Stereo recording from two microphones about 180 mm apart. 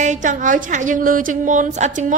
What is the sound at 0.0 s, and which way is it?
A woman's voice, 45° right (ahead or behind).